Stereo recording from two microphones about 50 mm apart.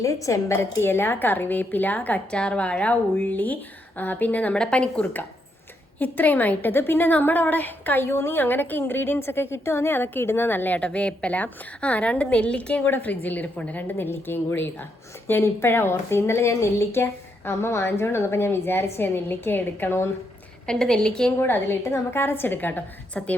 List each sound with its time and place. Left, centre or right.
0.0 s a woman's voice: left
4.5 s a woman's voice: left
6.0 s a woman's voice: left
10.8 s a woman's voice: left
14.1 s a woman's voice: left
20.7 s a woman's voice: centre
21.3 s a woman's voice: left